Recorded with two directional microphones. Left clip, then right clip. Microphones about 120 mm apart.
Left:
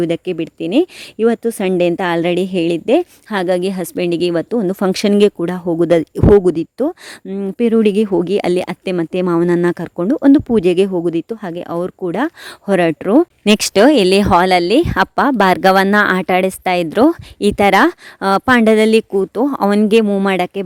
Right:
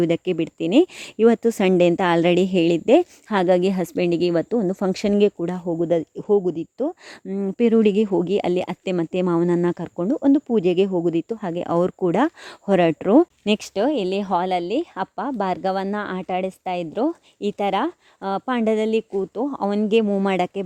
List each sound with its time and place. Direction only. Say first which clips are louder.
0.0 s speech: left 3 dB; 5° left (ahead or behind)
3.9 s speech: left 5 dB; 15° left (ahead or behind); by 5.6 s 35° left (ahead or behind)
5.6 s speech: left 8 dB; 55° left (ahead or behind)
7.3 s speech: left 4 dB; 15° left (ahead or behind)
11.4 s speech: even; centre (ahead or behind)
12.6 s speech: left 4 dB; 20° left (ahead or behind)
13.4 s speech: left 11 dB; 80° left; by 19.9 s 55° left (ahead or behind)
19.9 s speech: left 6 dB; 35° left (ahead or behind)
20.3 s speech: left 5 dB; 20° left (ahead or behind)